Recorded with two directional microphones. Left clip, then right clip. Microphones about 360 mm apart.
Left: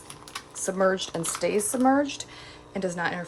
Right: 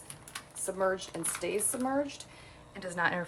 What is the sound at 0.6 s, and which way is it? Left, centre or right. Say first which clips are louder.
Speech: left 7 dB; left.